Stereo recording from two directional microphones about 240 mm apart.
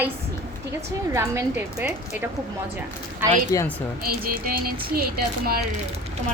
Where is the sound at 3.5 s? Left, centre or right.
Centre.